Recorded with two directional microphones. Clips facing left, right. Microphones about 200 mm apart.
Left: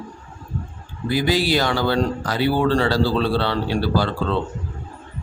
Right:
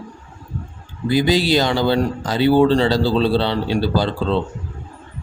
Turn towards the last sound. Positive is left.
turn(degrees=-20)  # may be behind; listen again after turning